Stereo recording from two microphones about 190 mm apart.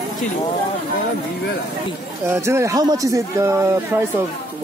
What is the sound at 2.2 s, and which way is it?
Speech, 15° right (ahead or behind).